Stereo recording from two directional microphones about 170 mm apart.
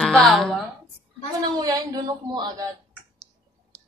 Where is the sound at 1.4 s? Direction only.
20° right (ahead or behind).